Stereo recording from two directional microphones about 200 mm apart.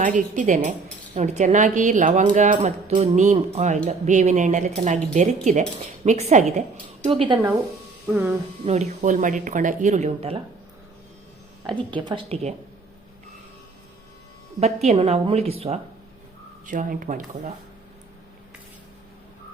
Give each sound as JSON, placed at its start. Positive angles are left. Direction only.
{"t": 0.0, "sound": "speech", "side_deg": -40}
{"t": 8.1, "sound": "speech", "side_deg": -10}
{"t": 8.6, "sound": "speech", "side_deg": -35}
{"t": 11.9, "sound": "speech", "side_deg": -25}
{"t": 14.6, "sound": "speech", "side_deg": -35}
{"t": 16.6, "sound": "speech", "side_deg": -40}